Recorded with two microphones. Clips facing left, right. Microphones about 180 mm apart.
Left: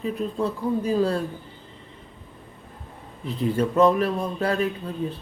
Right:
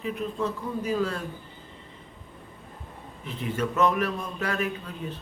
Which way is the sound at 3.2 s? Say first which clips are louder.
Left 6 dB; 35° left (ahead or behind).